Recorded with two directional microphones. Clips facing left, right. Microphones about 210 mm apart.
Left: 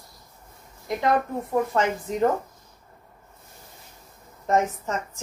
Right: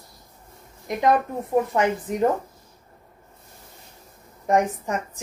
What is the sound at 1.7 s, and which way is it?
Speech, 15° right (ahead or behind).